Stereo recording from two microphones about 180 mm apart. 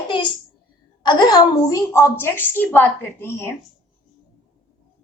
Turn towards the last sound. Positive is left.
turn(degrees=15)  # may be behind; listen again after turning